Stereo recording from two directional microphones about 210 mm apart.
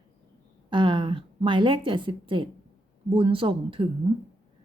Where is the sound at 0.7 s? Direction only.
25° right (ahead or behind).